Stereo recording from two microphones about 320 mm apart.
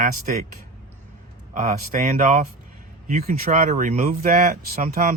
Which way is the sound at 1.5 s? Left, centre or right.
Right.